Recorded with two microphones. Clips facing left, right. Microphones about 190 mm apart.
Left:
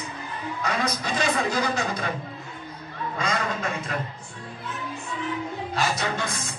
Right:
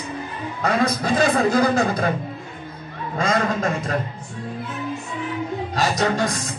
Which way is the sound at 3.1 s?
45° right (ahead or behind).